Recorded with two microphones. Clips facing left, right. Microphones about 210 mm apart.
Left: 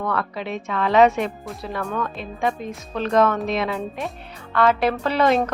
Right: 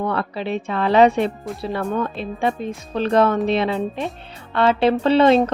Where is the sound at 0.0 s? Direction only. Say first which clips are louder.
Right 3 dB; 30° right (ahead or behind).